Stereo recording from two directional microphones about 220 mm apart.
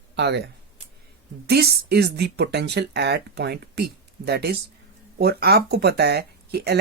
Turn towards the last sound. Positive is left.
turn(degrees=-45)  # may be behind; listen again after turning